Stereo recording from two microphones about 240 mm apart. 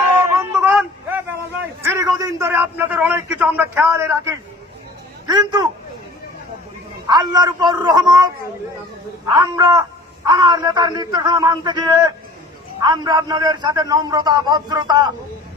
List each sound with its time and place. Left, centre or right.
0.3 s a sound: centre
0.8 s vehicle: centre
1.8 s a man's voice: centre
7.1 s a man's voice: centre